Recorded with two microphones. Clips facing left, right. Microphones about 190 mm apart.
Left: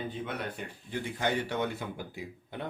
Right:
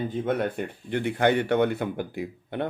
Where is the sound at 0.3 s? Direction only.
55° right (ahead or behind).